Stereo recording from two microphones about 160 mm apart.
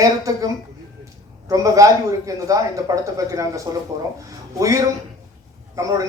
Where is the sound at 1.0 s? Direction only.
20° right (ahead or behind).